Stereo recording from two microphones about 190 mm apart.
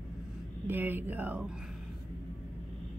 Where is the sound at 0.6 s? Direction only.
10° right (ahead or behind).